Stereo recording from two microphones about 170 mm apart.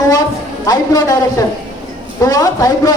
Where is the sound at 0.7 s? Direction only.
20° left (ahead or behind).